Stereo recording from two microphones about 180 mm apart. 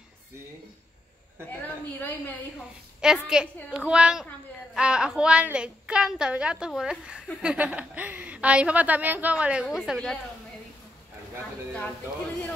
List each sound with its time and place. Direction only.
1.5 s a woman's voice: 10° left (ahead or behind)
3.0 s a woman's voice: 5° right (ahead or behind)